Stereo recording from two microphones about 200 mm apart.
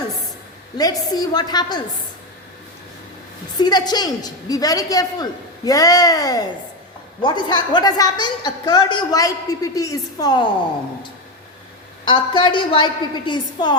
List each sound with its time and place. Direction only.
0.8 s a woman's voice: 20° left (ahead or behind)
3.6 s a woman's voice: 20° left (ahead or behind)
12.0 s a woman's voice: 25° left (ahead or behind)